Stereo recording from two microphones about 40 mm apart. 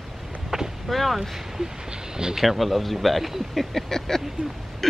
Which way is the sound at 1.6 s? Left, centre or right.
Centre.